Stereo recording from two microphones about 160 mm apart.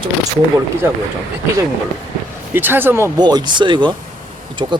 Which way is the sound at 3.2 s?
25° right (ahead or behind).